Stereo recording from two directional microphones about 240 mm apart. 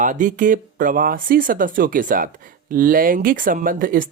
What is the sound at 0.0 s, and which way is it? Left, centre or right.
Speech, right.